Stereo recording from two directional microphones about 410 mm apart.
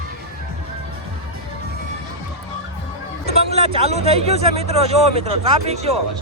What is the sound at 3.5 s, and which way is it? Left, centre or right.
Speech, centre.